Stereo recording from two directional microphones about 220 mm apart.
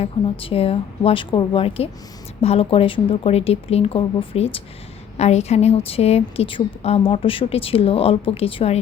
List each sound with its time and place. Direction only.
0.0 s a woman's voice: 25° left (ahead or behind)